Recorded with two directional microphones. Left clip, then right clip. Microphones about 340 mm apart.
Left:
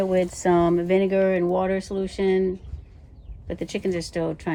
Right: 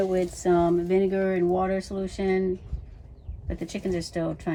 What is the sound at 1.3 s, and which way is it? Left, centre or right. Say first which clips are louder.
Speech: left 2 dB; centre.